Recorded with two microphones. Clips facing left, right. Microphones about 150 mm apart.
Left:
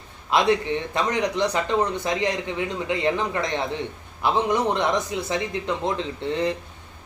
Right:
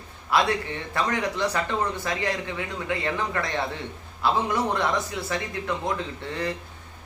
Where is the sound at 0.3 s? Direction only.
20° left (ahead or behind).